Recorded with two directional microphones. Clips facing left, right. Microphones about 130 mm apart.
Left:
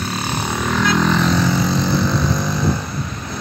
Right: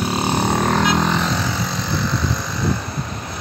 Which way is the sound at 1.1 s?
10° right (ahead or behind).